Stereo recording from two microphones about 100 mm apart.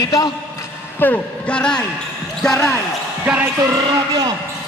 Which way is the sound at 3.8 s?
45° right (ahead or behind).